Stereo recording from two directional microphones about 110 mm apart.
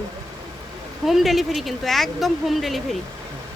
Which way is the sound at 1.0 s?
Centre (ahead or behind).